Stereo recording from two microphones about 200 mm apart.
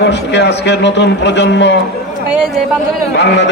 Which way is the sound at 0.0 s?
60° left (ahead or behind).